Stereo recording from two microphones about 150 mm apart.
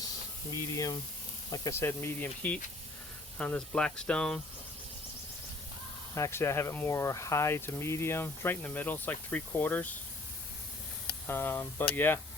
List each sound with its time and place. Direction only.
0.5 s speech: 20° left (ahead or behind); by 4.4 s 5° left (ahead or behind)
6.1 s speech: 20° left (ahead or behind)
11.3 s speech: 15° left (ahead or behind)